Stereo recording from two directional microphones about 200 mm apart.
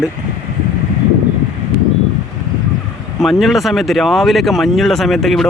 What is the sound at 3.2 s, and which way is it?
Speech, centre (ahead or behind).